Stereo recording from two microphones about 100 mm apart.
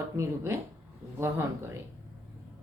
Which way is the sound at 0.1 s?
30° right (ahead or behind).